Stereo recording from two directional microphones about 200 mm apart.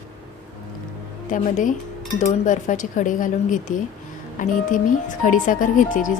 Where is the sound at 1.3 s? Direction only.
40° left (ahead or behind).